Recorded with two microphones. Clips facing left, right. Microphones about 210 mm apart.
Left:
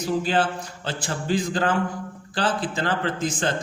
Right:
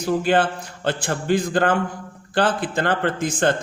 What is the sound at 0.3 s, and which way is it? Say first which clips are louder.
A man's voice: right 4 dB; 60° right (ahead or behind).